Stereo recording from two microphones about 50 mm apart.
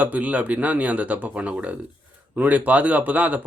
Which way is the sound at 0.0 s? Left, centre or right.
Right.